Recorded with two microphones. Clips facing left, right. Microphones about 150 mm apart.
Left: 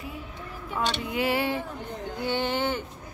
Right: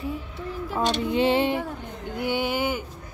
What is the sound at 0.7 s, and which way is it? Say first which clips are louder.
Female singing: right 5 dB; 25° right (ahead or behind).